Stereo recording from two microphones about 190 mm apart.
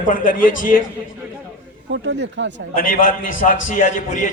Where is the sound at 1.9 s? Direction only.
70° right (ahead or behind).